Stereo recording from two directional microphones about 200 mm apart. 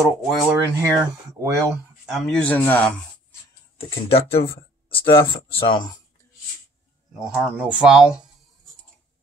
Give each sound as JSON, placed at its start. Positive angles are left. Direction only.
{"t": 0.3, "sound": "speech", "side_deg": 0}
{"t": 0.7, "sound": "speech", "side_deg": -15}
{"t": 2.1, "sound": "speech", "side_deg": 5}
{"t": 3.7, "sound": "speech", "side_deg": 30}
{"t": 7.2, "sound": "speech", "side_deg": -5}